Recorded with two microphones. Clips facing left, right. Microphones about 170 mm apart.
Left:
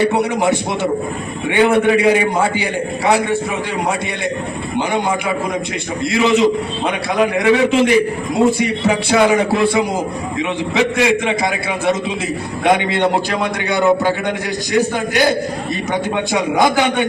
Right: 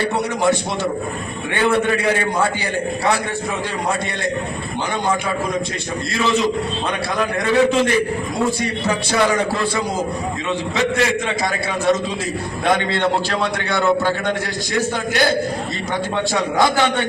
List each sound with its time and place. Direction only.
1.5 s a man's voice: 15° left (ahead or behind)
6.1 s a man's voice: 20° left (ahead or behind)
10.8 s a man's voice: 15° left (ahead or behind)
12.6 s a man's voice: 15° left (ahead or behind)